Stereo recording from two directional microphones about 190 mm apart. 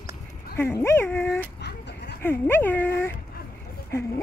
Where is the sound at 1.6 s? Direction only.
60° left (ahead or behind).